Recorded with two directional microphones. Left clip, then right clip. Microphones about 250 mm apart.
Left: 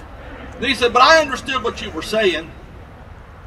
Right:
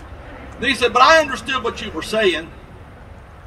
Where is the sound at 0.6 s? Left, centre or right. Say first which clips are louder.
Even; centre.